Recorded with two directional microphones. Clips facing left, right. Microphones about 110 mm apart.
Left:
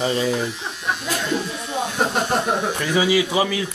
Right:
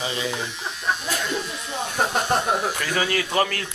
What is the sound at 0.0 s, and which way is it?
Speech, 35° left (ahead or behind).